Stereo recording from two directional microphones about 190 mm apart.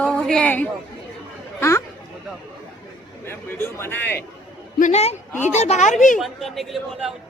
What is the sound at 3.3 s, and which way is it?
Speech, 10° left (ahead or behind).